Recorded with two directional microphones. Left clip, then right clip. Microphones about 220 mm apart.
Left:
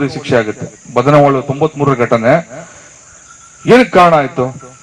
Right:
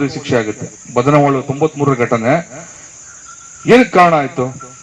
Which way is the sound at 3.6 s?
30° left (ahead or behind).